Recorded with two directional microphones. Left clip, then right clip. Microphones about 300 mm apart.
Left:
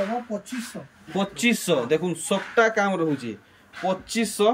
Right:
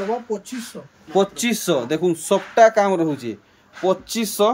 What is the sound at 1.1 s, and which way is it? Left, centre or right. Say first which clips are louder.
Speech: right 5 dB; centre.